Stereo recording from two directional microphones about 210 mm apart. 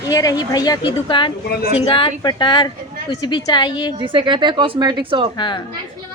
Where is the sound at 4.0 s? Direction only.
20° right (ahead or behind).